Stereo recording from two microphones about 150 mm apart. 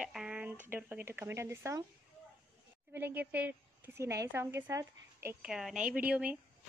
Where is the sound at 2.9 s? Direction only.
15° right (ahead or behind).